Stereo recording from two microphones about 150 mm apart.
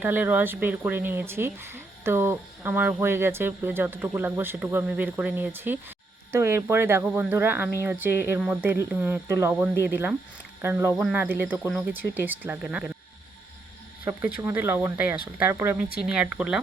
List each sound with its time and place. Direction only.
0.0 s speech: 10° right (ahead or behind)
14.2 s speech: 10° right (ahead or behind)